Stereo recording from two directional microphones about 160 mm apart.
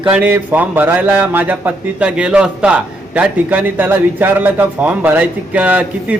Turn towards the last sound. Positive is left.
turn(degrees=-10)  # may be behind; listen again after turning